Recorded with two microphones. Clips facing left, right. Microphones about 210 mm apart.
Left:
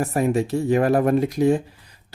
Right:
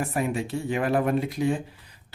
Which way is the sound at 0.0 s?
40° left (ahead or behind).